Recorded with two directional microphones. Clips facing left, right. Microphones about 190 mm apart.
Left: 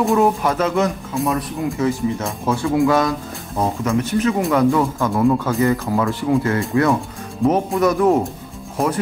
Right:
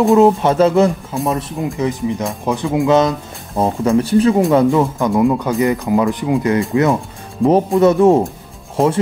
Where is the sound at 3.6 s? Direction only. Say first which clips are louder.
Right 5 dB; 30° right (ahead or behind).